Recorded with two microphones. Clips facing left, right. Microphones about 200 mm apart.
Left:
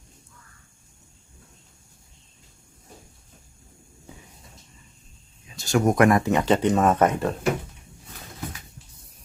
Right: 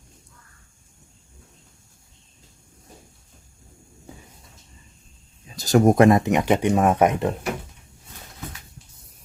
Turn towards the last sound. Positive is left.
turn(degrees=-15)  # may be behind; listen again after turning